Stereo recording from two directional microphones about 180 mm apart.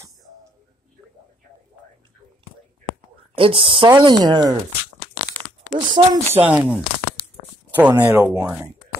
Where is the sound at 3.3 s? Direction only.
30° right (ahead or behind).